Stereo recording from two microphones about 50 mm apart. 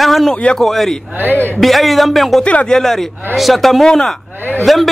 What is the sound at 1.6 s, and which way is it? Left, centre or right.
Speech, centre.